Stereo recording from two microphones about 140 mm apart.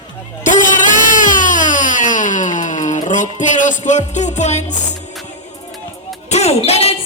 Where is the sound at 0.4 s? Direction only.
65° left (ahead or behind).